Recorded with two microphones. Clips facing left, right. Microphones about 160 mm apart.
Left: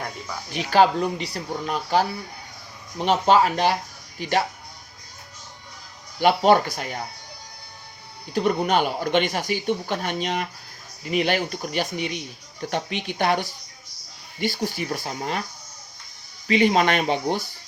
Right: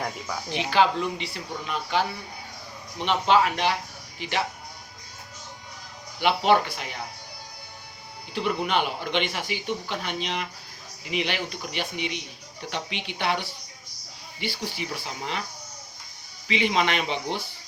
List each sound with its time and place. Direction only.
0.5 s speech: 45° left (ahead or behind)
6.1 s speech: 45° left (ahead or behind)
8.3 s speech: 40° left (ahead or behind)
16.5 s speech: 45° left (ahead or behind)